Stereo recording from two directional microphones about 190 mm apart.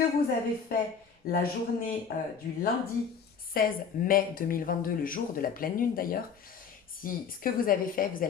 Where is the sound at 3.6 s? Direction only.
50° left (ahead or behind).